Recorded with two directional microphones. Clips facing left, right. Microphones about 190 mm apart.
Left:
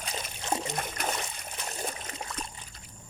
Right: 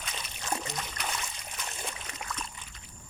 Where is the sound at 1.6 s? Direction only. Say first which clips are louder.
Left 4 dB; 40° left (ahead or behind).